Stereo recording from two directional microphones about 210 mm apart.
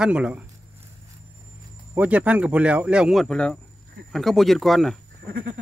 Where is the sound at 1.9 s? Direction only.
5° right (ahead or behind).